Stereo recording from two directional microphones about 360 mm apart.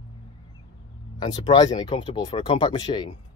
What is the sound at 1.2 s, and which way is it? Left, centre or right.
Speech, centre.